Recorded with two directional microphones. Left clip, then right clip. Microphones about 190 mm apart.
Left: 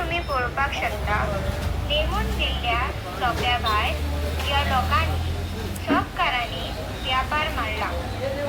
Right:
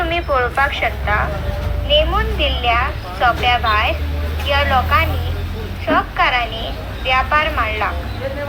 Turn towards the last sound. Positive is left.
turn(degrees=-30)  # may be behind; listen again after turning